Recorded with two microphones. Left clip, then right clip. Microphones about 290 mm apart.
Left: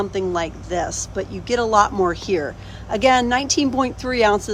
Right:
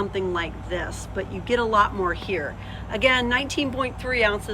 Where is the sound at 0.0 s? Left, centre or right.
Centre.